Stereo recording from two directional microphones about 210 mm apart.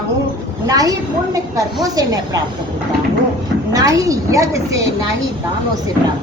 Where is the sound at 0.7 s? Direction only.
15° right (ahead or behind).